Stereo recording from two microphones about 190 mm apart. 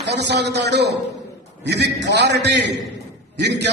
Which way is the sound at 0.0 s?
60° right (ahead or behind).